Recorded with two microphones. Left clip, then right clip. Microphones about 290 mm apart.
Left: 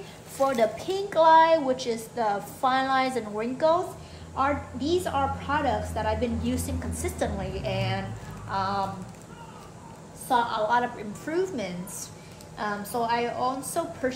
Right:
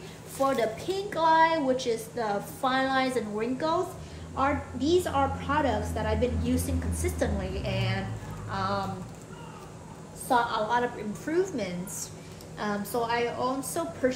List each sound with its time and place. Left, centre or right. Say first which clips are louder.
0.4 s a woman's voice: left 3 dB; centre
10.2 s a woman's voice: left 1 dB; centre